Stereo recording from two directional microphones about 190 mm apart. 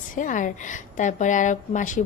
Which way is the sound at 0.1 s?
45° left (ahead or behind).